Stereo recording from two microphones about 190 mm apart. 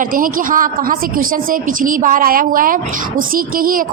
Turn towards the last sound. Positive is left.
turn(degrees=-50)  # may be behind; listen again after turning